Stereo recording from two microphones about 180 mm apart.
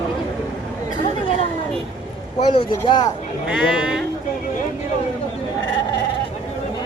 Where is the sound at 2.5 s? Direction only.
30° left (ahead or behind).